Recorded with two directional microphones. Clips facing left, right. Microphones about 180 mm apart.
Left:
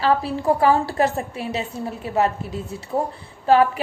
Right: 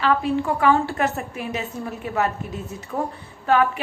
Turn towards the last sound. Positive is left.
turn(degrees=35)  # may be behind; listen again after turning